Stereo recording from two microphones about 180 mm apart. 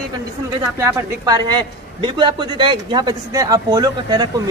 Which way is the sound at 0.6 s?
15° right (ahead or behind).